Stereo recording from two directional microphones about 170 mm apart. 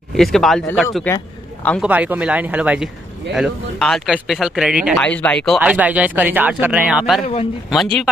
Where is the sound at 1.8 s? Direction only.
10° right (ahead or behind).